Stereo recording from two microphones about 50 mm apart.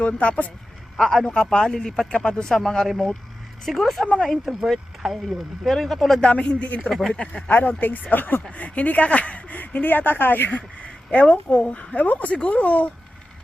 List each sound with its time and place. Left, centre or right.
0.0 s speech: left
0.9 s a man's voice: centre
2.5 s speech: centre
4.0 s speech: left
4.3 s speech: centre
6.3 s speech: left
7.5 s speech: left
10.8 s a woman's voice: left
11.9 s speech: left